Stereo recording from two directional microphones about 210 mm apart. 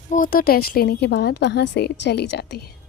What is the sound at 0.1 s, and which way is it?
A woman's voice, 40° left (ahead or behind).